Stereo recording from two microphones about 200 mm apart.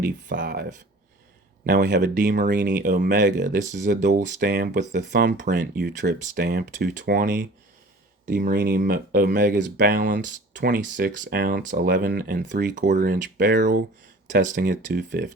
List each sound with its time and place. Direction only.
0.3 s speech: 45° right (ahead or behind)
4.8 s speech: 60° right (ahead or behind); by 15.0 s 40° right (ahead or behind)